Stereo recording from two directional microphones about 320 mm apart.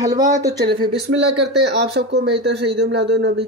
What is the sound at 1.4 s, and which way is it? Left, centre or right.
Speech, right.